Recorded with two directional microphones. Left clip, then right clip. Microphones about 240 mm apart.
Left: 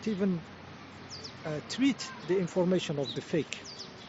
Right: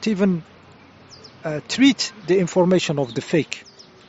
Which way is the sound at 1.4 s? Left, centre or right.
Right.